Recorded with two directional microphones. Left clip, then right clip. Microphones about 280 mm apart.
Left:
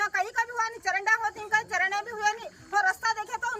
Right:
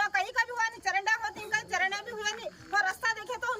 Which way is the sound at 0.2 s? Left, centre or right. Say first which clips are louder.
Left 1 dB; centre.